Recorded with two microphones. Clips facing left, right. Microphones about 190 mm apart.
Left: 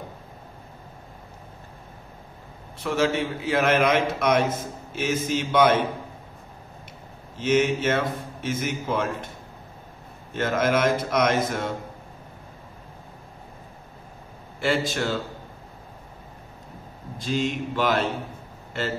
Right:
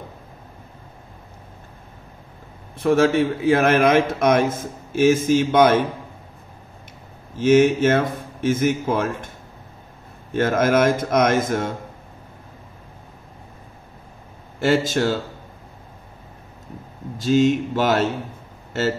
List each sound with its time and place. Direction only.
2.8 s a man's voice: 50° right (ahead or behind)
7.3 s a man's voice: 50° right (ahead or behind)
10.3 s a man's voice: 50° right (ahead or behind)
14.6 s a man's voice: 45° right (ahead or behind)
17.2 s a man's voice: 45° right (ahead or behind)